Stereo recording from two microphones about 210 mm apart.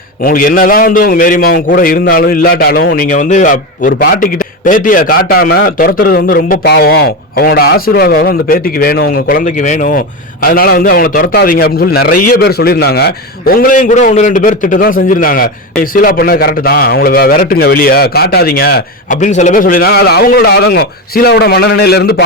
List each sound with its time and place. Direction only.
0.3 s a man's voice: 40° left (ahead or behind)
19.2 s a man's voice: 35° left (ahead or behind)